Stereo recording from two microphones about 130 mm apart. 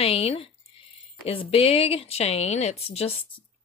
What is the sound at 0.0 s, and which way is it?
Speech, 50° left (ahead or behind).